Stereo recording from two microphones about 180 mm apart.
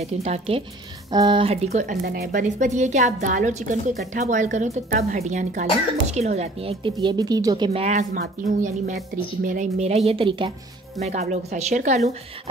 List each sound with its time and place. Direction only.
0.0 s a woman's voice: 35° right (ahead or behind)
2.0 s speech: 60° right (ahead or behind)
2.4 s a woman's voice: 40° right (ahead or behind); by 7.8 s 25° right (ahead or behind)
7.8 s a woman's voice: 40° right (ahead or behind)
8.1 s a woman's voice: 50° right (ahead or behind)